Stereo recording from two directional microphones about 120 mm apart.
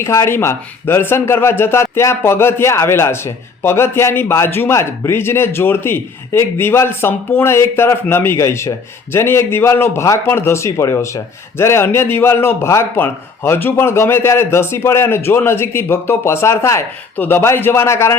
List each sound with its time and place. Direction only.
0.0 s a man's voice: 25° left (ahead or behind)